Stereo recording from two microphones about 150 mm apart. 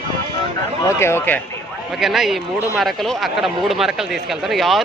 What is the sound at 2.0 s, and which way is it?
Speech, centre (ahead or behind).